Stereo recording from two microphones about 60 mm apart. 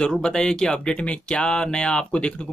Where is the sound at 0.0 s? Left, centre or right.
Centre.